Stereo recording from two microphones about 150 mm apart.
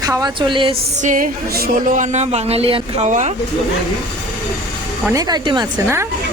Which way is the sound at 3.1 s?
55° right (ahead or behind).